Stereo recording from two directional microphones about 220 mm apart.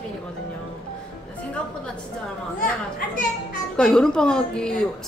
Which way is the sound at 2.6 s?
40° left (ahead or behind).